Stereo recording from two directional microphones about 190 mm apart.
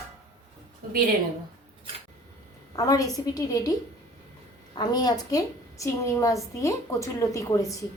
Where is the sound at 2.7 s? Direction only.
20° left (ahead or behind).